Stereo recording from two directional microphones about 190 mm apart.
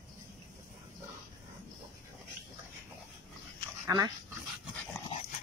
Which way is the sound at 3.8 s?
20° right (ahead or behind).